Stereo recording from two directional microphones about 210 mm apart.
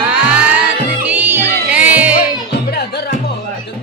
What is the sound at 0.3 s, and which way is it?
Music, 5° right (ahead or behind).